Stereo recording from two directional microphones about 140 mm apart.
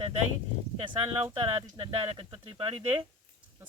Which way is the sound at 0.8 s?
40° right (ahead or behind).